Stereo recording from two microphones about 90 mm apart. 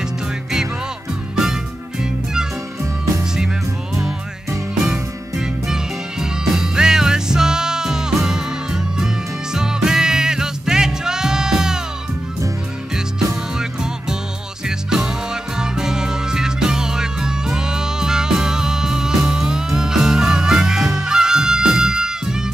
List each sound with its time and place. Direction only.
1.3 s music: 5° right (ahead or behind)
4.8 s music: 10° right (ahead or behind)
14.9 s music: 5° right (ahead or behind)